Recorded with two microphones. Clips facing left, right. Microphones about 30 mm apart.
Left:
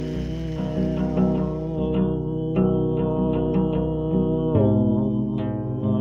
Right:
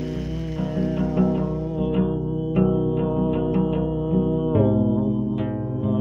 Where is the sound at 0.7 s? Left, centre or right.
Centre.